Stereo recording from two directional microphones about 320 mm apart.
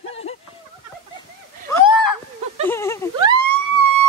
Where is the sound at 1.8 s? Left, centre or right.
Left.